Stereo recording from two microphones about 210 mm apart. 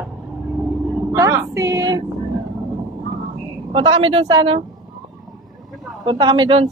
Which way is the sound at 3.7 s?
25° right (ahead or behind).